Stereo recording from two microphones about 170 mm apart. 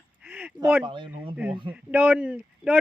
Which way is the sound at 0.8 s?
30° right (ahead or behind).